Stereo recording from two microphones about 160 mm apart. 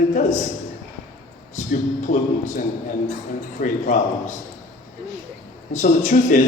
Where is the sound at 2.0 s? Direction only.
50° left (ahead or behind).